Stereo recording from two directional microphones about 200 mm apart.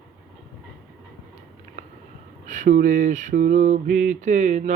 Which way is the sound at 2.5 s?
40° right (ahead or behind).